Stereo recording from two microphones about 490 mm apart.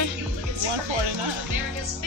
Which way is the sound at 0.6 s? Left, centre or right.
Right.